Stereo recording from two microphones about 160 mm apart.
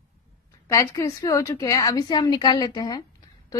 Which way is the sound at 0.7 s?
20° left (ahead or behind).